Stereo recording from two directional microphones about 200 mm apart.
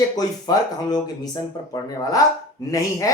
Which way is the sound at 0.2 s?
20° left (ahead or behind).